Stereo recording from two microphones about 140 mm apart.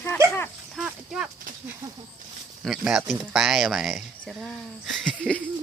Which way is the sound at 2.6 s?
5° right (ahead or behind).